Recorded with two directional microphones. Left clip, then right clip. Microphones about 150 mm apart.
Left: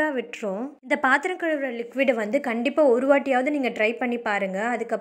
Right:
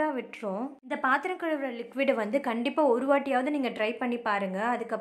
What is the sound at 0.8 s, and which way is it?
Speech, 30° left (ahead or behind).